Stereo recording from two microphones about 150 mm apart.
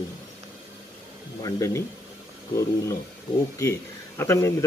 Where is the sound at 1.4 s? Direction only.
20° left (ahead or behind).